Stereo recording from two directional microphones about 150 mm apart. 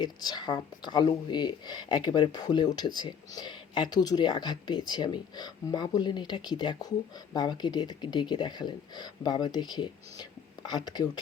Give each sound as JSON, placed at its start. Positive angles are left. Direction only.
{"t": 0.0, "sound": "speech", "side_deg": 30}